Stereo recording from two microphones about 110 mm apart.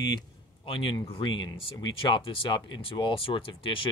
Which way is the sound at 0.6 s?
50° left (ahead or behind).